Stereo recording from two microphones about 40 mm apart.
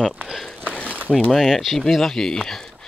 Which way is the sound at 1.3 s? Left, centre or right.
Centre.